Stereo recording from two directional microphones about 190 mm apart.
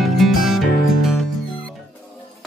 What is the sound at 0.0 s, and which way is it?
Music, centre (ahead or behind).